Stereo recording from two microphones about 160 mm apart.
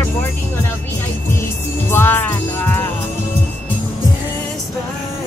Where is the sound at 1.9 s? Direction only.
15° left (ahead or behind).